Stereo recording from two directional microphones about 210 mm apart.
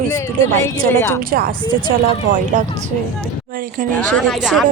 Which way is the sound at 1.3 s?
45° right (ahead or behind).